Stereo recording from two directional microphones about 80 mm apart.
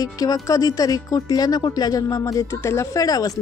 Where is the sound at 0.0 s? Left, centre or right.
Left.